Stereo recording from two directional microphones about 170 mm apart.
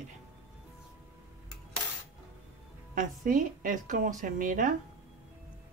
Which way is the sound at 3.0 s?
50° right (ahead or behind).